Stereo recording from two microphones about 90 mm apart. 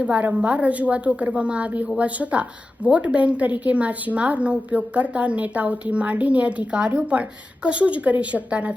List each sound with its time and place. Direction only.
0.0 s a woman's voice: 15° right (ahead or behind)